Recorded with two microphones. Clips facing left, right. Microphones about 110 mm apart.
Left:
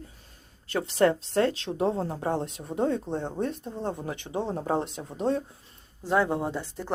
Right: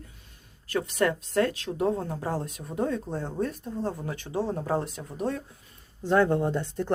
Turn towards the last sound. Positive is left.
turn(degrees=0)  # may be behind; listen again after turning